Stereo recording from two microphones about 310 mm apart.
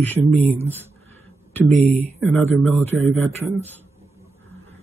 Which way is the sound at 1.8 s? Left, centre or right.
Centre.